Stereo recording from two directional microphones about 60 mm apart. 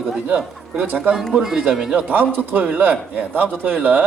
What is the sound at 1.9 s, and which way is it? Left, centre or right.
A man's voice, right.